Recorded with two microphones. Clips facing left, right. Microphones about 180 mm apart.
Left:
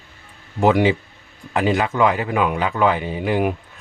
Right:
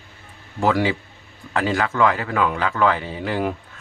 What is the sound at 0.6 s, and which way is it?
Speech, 20° left (ahead or behind).